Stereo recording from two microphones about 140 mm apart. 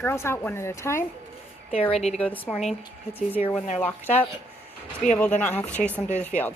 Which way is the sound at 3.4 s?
60° left (ahead or behind).